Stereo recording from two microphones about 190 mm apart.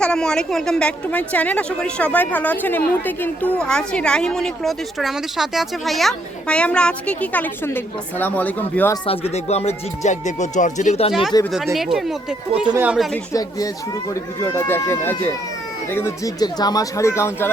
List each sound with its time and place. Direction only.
0.0 s a woman's voice: 5° left (ahead or behind)
9.0 s speech: 35° left (ahead or behind)
11.1 s a woman's voice: centre (ahead or behind)
13.3 s speech: 20° left (ahead or behind)